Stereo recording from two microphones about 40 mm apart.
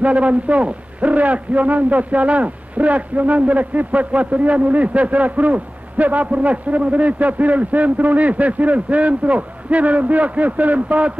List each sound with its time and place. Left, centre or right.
0.0 s speech: right